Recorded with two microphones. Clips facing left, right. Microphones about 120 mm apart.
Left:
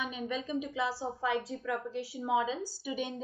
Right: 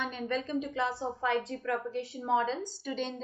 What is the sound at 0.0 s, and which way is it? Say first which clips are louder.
A woman's voice: right 2 dB; 5° left (ahead or behind).